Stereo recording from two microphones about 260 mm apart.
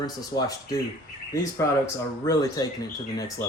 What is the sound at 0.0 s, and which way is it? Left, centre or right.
Speech, centre.